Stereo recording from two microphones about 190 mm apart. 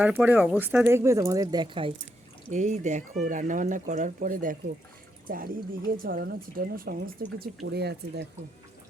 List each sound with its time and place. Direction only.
0.0 s speech: 10° right (ahead or behind); by 1.9 s 25° right (ahead or behind)
2.5 s speech: 40° right (ahead or behind); by 8.3 s 60° right (ahead or behind)